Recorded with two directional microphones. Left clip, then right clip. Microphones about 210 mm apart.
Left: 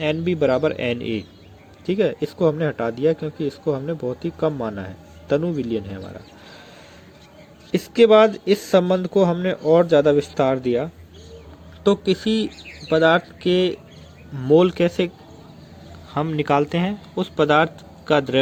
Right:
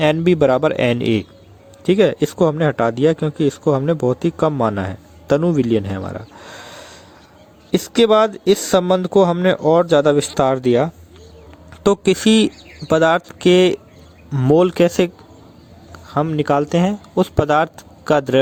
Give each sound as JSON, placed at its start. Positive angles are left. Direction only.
{"t": 0.0, "sound": "speech", "side_deg": -40}
{"t": 16.0, "sound": "speech", "side_deg": -20}